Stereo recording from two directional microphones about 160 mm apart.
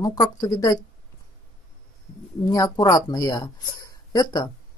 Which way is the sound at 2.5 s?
25° left (ahead or behind).